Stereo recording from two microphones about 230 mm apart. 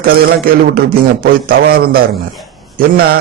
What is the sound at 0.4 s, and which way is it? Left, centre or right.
A man's voice, right.